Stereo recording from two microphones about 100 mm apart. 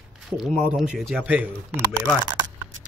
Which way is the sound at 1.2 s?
15° right (ahead or behind).